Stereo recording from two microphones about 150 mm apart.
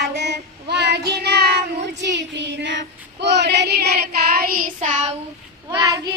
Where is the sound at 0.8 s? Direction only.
90° right.